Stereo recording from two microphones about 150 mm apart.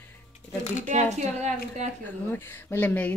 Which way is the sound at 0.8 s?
50° right (ahead or behind).